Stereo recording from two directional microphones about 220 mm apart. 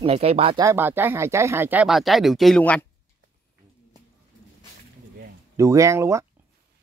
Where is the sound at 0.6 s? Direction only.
10° right (ahead or behind); by 2.8 s 5° left (ahead or behind).